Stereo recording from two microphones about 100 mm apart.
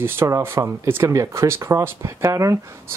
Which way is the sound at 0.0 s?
25° right (ahead or behind).